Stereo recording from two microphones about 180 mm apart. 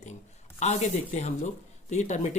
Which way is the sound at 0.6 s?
40° left (ahead or behind).